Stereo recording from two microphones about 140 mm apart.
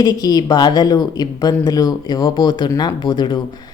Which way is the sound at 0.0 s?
25° left (ahead or behind).